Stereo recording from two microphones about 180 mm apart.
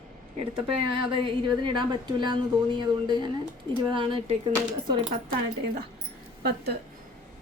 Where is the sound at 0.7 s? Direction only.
30° right (ahead or behind).